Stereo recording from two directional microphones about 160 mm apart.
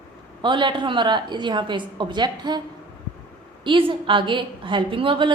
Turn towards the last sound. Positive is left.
turn(degrees=-30)  # may be behind; listen again after turning